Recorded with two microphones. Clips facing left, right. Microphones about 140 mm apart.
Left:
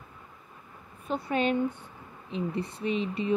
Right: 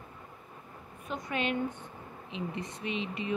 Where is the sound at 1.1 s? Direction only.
35° left (ahead or behind).